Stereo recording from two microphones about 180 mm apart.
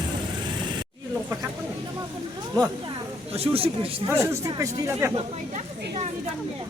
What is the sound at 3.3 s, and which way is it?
Speech, 30° right (ahead or behind).